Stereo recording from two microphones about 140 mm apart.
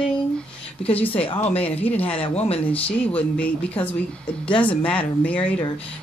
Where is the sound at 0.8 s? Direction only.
10° left (ahead or behind).